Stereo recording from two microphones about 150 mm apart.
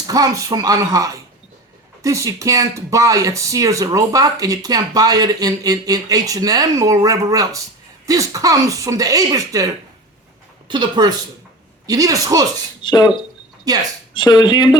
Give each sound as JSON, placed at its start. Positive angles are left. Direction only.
{"t": 0.1, "sound": "speech", "side_deg": -25}
{"t": 10.7, "sound": "speech", "side_deg": -30}
{"t": 12.8, "sound": "speech", "side_deg": 30}
{"t": 13.7, "sound": "speech", "side_deg": -25}
{"t": 14.1, "sound": "speech", "side_deg": 30}